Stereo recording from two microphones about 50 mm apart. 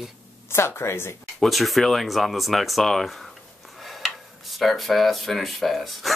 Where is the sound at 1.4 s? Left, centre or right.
Centre.